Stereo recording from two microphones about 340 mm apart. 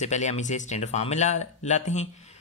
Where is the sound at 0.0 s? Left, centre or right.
Centre.